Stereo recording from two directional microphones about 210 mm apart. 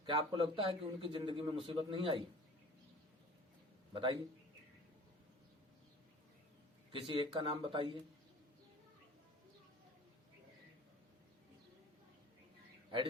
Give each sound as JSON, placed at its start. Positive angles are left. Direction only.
{"t": 0.0, "sound": "a man's voice", "side_deg": -25}
{"t": 3.9, "sound": "a man's voice", "side_deg": -25}
{"t": 6.9, "sound": "a man's voice", "side_deg": -25}